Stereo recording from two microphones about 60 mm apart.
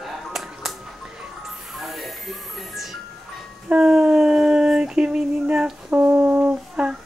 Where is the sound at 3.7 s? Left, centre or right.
Centre.